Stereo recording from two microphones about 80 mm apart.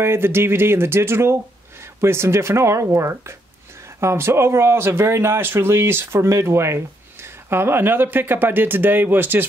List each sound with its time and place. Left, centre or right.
0.0 s speech: right